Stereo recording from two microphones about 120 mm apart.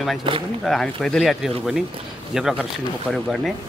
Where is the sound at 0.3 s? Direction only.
45° right (ahead or behind).